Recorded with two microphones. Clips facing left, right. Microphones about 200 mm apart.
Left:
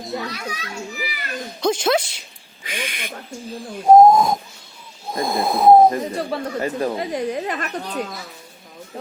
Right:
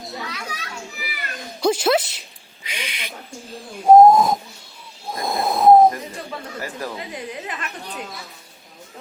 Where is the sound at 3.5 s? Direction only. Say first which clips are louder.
Even; 5° right (ahead or behind).